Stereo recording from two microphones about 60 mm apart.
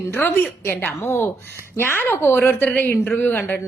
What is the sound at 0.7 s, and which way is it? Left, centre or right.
A woman's voice, left.